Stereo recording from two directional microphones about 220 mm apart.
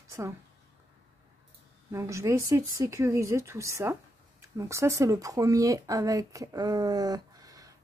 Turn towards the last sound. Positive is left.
turn(degrees=-15)  # may be behind; listen again after turning